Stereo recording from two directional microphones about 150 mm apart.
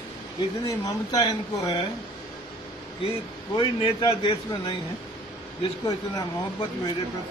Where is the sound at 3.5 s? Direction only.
30° left (ahead or behind).